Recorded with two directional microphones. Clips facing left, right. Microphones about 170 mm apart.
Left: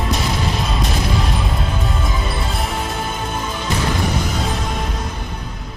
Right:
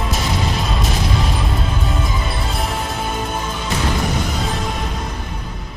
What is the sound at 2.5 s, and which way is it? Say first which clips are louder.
Music: even; centre (ahead or behind).